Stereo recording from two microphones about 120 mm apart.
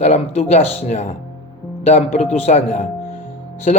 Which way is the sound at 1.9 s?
70° left (ahead or behind).